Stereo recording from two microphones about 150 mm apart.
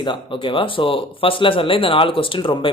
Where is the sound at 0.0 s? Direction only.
35° left (ahead or behind).